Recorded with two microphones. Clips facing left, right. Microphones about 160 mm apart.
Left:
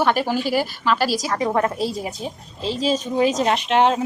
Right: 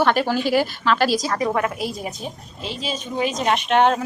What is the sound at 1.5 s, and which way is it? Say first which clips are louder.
Speech: left 2 dB; 35° left (ahead or behind).